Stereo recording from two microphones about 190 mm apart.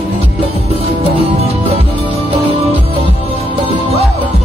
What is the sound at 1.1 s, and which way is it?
Music, 30° right (ahead or behind).